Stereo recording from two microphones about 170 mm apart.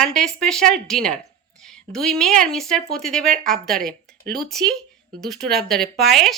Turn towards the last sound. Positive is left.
turn(degrees=0)  # may be behind; listen again after turning